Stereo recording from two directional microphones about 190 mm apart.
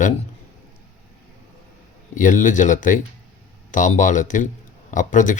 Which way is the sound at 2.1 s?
40° left (ahead or behind).